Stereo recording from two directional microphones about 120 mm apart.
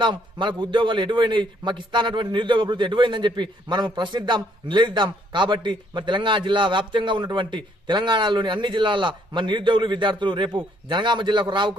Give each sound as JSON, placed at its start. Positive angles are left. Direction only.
{"t": 0.0, "sound": "a man's voice", "side_deg": -40}